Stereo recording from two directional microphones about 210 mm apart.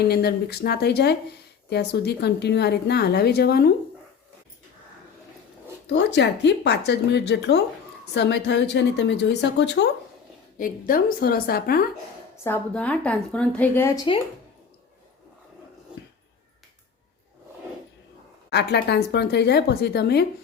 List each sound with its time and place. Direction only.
0.0 s speech: 50° left (ahead or behind)
5.9 s a woman's voice: 55° left (ahead or behind)
10.6 s speech: 40° left (ahead or behind)
12.4 s a woman's voice: 10° left (ahead or behind)
18.5 s speech: 50° left (ahead or behind)